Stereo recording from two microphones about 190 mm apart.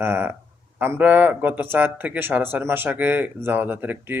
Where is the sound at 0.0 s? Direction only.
10° right (ahead or behind).